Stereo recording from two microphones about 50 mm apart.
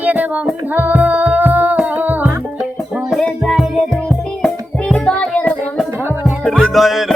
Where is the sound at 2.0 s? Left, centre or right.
Right.